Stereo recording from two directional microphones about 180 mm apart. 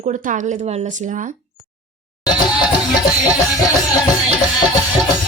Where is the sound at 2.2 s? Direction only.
25° left (ahead or behind).